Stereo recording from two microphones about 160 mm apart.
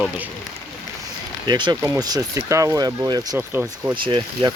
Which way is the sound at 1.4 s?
25° right (ahead or behind).